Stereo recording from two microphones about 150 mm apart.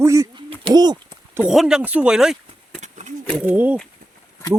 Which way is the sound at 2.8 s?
50° right (ahead or behind).